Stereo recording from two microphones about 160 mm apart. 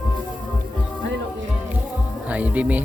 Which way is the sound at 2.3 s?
10° right (ahead or behind).